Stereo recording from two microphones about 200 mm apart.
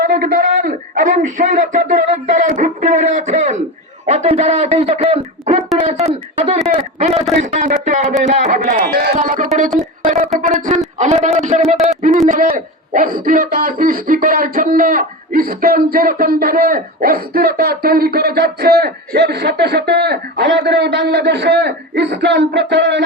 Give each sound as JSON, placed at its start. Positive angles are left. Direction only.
{"t": 0.0, "sound": "a man's voice", "side_deg": -45}